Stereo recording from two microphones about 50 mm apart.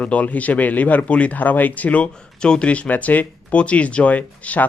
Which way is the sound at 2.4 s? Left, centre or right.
Centre.